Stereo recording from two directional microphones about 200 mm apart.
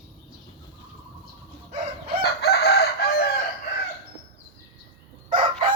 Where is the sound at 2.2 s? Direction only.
55° left (ahead or behind).